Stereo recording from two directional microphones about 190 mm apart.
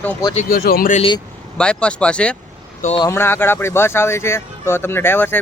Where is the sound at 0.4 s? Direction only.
50° left (ahead or behind).